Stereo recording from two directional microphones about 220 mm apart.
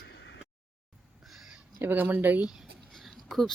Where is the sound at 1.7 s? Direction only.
10° right (ahead or behind).